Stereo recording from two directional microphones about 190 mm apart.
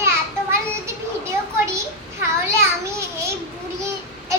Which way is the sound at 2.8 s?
15° right (ahead or behind).